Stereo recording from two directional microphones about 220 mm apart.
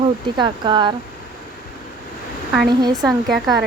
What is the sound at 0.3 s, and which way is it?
Speech, 20° right (ahead or behind).